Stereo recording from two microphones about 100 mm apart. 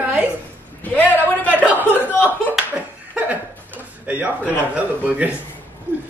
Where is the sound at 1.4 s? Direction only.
15° left (ahead or behind).